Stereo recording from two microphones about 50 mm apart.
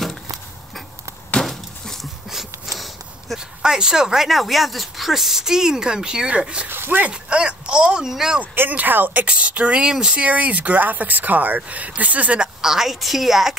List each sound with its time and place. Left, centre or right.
1.4 s a sound: centre
3.3 s speech: centre
6.7 s speech: right
7.1 s speech: centre
8.5 s speech: right
12.6 s a woman's voice: centre